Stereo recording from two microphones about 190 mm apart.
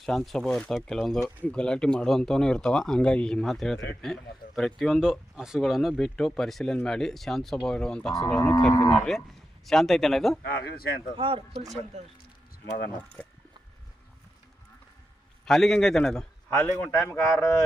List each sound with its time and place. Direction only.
0.0 s speech: centre (ahead or behind)
8.4 s a man's voice: 15° left (ahead or behind)
8.9 s speech: 5° left (ahead or behind)
10.6 s speech: 55° left (ahead or behind)
11.2 s speech: 30° right (ahead or behind)
13.2 s a sound: 10° left (ahead or behind)
15.4 s speech: centre (ahead or behind)
16.5 s a man's voice: 15° left (ahead or behind)